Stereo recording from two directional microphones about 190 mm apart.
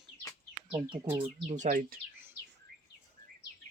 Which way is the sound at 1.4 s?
40° right (ahead or behind).